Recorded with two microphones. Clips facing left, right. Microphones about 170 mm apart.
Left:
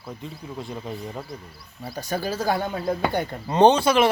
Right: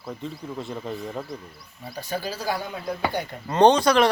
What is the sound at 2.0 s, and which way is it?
Speech, 45° left (ahead or behind).